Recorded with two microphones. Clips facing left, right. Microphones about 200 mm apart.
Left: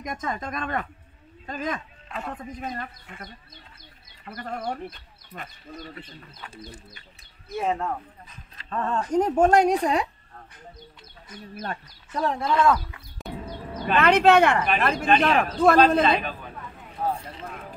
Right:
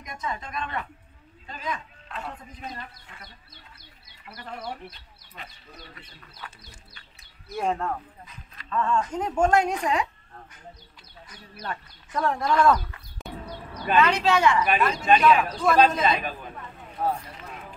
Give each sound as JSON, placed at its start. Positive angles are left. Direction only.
{"t": 0.0, "sound": "speech", "side_deg": 50}
{"t": 7.5, "sound": "speech", "side_deg": 5}
{"t": 8.5, "sound": "speech", "side_deg": 35}
{"t": 11.3, "sound": "speech", "side_deg": 45}
{"t": 12.1, "sound": "speech", "side_deg": 30}
{"t": 12.6, "sound": "speech", "side_deg": 0}
{"t": 13.9, "sound": "a man's voice", "side_deg": 55}